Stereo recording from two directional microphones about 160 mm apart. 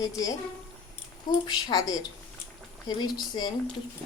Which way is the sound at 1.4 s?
25° left (ahead or behind).